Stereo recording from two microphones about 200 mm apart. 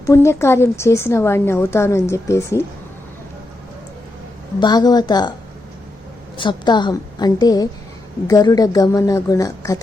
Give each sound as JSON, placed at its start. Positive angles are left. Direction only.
{"t": 0.0, "sound": "speech", "side_deg": 15}
{"t": 4.6, "sound": "a woman's voice", "side_deg": 20}
{"t": 6.3, "sound": "a woman's voice", "side_deg": 25}